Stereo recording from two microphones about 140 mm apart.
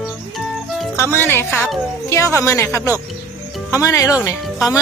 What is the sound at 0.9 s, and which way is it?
Speech, 15° left (ahead or behind).